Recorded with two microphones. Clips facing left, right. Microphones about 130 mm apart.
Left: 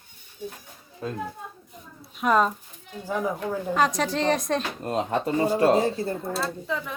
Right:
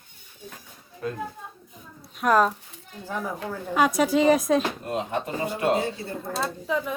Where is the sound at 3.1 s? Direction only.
15° left (ahead or behind).